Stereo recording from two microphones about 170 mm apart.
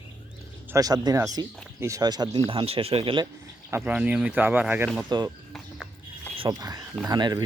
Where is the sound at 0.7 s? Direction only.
20° right (ahead or behind).